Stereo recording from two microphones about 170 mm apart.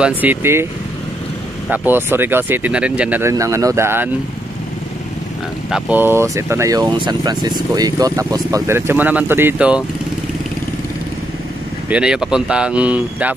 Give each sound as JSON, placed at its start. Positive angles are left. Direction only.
{"t": 0.2, "sound": "speech", "side_deg": -10}
{"t": 1.7, "sound": "speech", "side_deg": -10}
{"t": 5.7, "sound": "speech", "side_deg": -10}
{"t": 11.9, "sound": "speech", "side_deg": -5}